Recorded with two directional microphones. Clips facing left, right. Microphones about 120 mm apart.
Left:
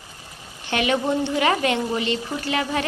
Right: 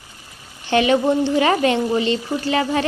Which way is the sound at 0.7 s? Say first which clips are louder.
Right 6 dB; 30° right (ahead or behind).